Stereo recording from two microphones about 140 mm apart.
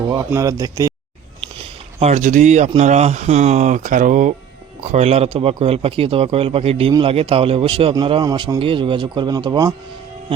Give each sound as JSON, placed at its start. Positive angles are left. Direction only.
{"t": 0.3, "sound": "speech", "side_deg": -25}
{"t": 2.0, "sound": "speech", "side_deg": -55}
{"t": 8.5, "sound": "speech", "side_deg": -40}